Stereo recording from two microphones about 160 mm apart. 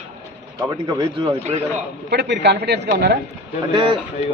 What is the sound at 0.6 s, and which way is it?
Speech, 25° right (ahead or behind).